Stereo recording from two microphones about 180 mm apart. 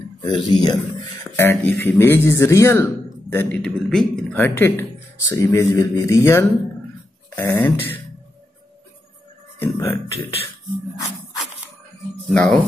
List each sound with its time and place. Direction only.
0.2 s speech: 25° left (ahead or behind)
1.4 s a man's voice: 10° left (ahead or behind)
9.6 s music: 10° left (ahead or behind)
10.1 s speech: 35° left (ahead or behind)
12.3 s speech: centre (ahead or behind)